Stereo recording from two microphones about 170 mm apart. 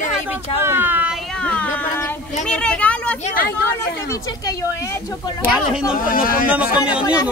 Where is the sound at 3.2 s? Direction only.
60° left (ahead or behind).